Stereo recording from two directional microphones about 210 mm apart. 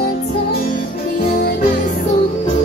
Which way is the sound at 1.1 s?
45° left (ahead or behind).